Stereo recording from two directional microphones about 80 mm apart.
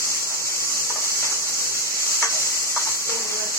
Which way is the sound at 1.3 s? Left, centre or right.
Left.